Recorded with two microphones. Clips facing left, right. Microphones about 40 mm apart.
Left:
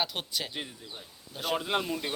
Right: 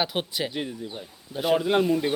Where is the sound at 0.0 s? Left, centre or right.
Centre.